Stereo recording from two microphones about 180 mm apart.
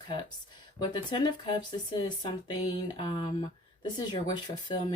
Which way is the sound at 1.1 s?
25° left (ahead or behind).